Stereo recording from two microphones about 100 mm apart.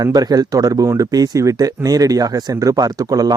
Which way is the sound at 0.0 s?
40° right (ahead or behind).